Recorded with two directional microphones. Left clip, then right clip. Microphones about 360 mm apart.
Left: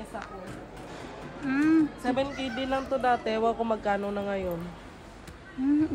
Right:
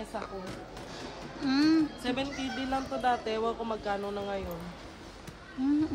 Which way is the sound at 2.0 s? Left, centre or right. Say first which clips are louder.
Left 4 dB; centre.